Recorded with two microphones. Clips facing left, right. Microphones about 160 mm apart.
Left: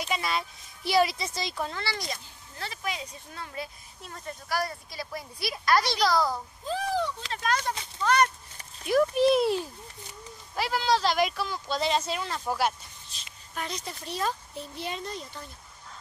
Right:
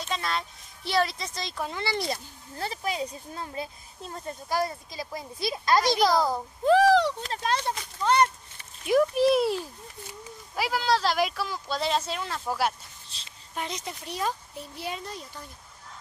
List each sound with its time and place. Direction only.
0.0 s speech: 10° left (ahead or behind)
1.7 s speech: 20° right (ahead or behind)
2.6 s speech: 35° right (ahead or behind); by 6.4 s 20° right (ahead or behind)
6.6 s speech: 70° right (ahead or behind)
7.3 s speech: 30° right (ahead or behind)
8.8 s speech: 5° right (ahead or behind)
13.1 s speech: 25° right (ahead or behind); by 15.4 s 5° right (ahead or behind)